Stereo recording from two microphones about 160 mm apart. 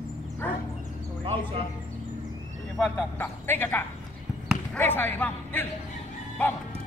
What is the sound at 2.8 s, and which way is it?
A man's voice, 10° left (ahead or behind).